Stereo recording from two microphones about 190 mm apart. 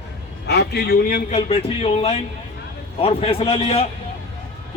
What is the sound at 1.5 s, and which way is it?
A man's voice, 30° left (ahead or behind).